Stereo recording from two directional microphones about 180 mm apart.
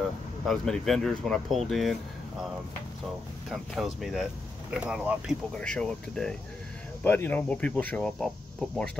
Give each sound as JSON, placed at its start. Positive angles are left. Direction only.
{"t": 0.5, "sound": "speech", "side_deg": 0}
{"t": 3.4, "sound": "speech", "side_deg": 0}
{"t": 5.5, "sound": "speech", "side_deg": 5}